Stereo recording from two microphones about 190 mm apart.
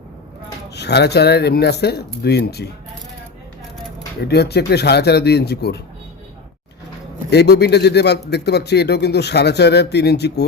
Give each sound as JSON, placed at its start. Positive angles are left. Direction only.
{"t": 0.7, "sound": "a man's voice", "side_deg": 60}
{"t": 4.2, "sound": "a man's voice", "side_deg": 60}
{"t": 7.3, "sound": "a man's voice", "side_deg": 60}